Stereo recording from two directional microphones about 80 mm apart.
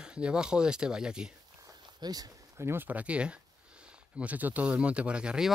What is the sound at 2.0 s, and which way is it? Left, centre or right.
Speech, right.